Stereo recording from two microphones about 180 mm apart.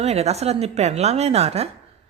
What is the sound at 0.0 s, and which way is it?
A woman's voice, 35° right (ahead or behind).